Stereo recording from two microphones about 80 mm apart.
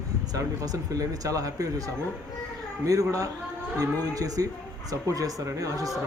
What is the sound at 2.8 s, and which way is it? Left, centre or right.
Speech, right.